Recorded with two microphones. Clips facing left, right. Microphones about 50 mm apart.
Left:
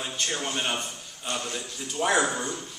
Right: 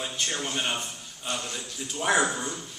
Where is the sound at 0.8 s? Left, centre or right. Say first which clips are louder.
Left 1 dB; centre.